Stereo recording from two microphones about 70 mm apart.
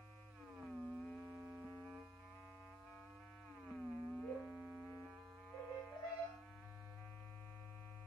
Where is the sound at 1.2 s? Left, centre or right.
Right.